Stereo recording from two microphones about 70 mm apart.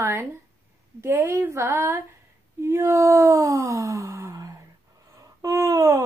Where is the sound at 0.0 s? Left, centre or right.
Right.